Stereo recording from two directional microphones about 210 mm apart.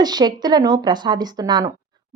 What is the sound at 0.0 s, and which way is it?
A woman's voice, 20° right (ahead or behind).